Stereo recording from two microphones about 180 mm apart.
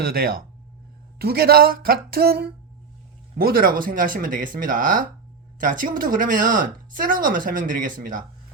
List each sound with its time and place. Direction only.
0.0 s speech: 55° right (ahead or behind)